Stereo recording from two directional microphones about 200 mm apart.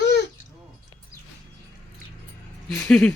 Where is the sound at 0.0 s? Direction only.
60° left (ahead or behind).